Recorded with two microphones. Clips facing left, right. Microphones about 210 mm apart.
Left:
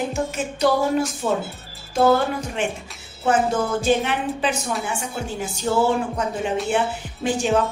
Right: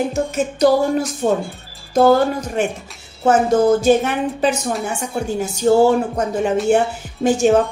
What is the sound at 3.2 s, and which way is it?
Speech, 40° right (ahead or behind).